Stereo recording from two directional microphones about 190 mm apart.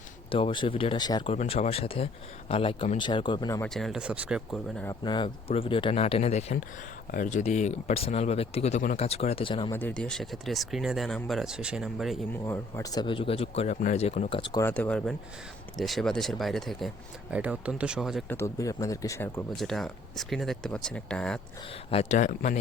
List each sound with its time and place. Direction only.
0.3 s speech: 30° left (ahead or behind)
3.6 s speech: centre (ahead or behind)
5.0 s speech: 25° left (ahead or behind)
9.7 s speech: 5° left (ahead or behind)
12.5 s speech: 15° left (ahead or behind)
14.6 s speech: 5° left (ahead or behind)
18.3 s speech: 15° left (ahead or behind)
19.5 s speech: centre (ahead or behind)
21.8 s speech: 35° left (ahead or behind)